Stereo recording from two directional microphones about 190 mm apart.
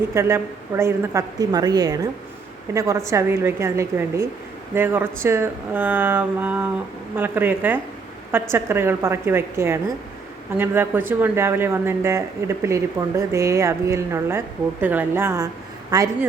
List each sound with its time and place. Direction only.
0.1 s a man's voice: 15° right (ahead or behind)